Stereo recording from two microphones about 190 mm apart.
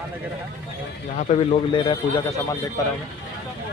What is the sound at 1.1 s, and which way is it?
Speech, 40° left (ahead or behind).